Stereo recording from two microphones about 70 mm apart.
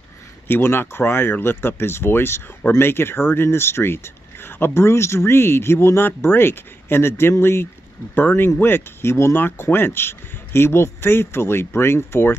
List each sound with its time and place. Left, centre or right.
0.5 s speech: left